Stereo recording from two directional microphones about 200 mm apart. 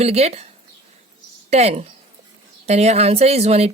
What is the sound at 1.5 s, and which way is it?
A woman's voice, 30° right (ahead or behind).